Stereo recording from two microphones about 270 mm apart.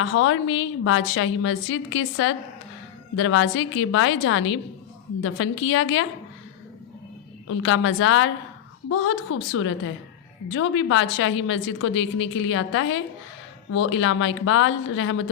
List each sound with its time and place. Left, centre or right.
0.0 s a woman's voice: left
7.4 s a woman's voice: left